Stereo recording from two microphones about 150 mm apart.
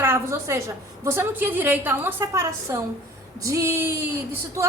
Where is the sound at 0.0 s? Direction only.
15° right (ahead or behind).